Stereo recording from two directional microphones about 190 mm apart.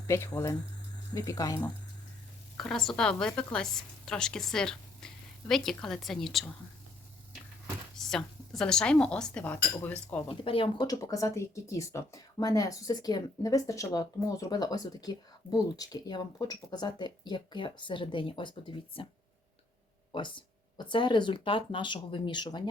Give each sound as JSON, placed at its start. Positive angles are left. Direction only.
{"t": 0.1, "sound": "speech", "side_deg": 15}
{"t": 2.6, "sound": "a woman's voice", "side_deg": 0}
{"t": 7.9, "sound": "a woman's voice", "side_deg": 0}
{"t": 10.2, "sound": "speech", "side_deg": 30}
{"t": 20.1, "sound": "speech", "side_deg": 25}